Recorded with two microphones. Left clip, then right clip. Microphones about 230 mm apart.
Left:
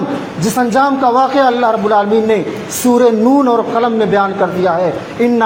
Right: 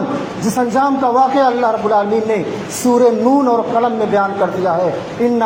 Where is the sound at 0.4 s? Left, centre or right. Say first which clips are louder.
Left 3 dB; left.